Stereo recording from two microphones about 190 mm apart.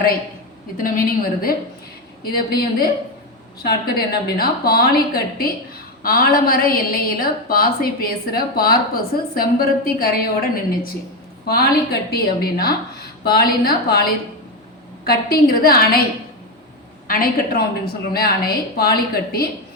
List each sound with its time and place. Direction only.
0.8 s a woman's voice: 50° left (ahead or behind)
17.1 s a woman's voice: 50° left (ahead or behind)